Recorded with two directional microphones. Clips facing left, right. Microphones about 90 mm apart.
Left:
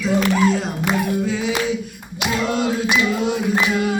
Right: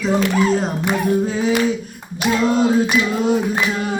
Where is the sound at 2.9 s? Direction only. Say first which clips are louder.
Right 2 dB; 40° right (ahead or behind).